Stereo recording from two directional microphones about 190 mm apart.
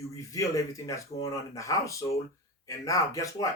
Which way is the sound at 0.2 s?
15° left (ahead or behind).